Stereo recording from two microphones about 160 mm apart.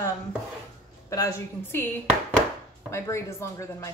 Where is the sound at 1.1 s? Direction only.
20° left (ahead or behind).